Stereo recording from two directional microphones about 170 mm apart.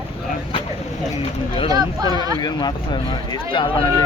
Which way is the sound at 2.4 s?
25° left (ahead or behind).